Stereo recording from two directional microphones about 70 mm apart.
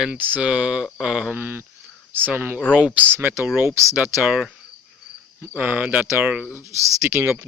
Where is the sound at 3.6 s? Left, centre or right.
Right.